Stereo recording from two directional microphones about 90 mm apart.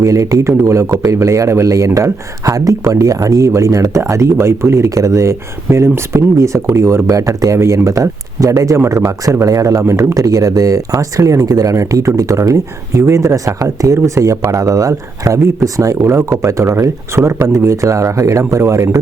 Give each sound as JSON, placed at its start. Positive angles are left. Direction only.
{"t": 0.0, "sound": "speech", "side_deg": -35}